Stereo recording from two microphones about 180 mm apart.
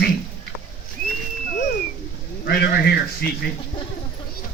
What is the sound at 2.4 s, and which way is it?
Speech, 60° left (ahead or behind).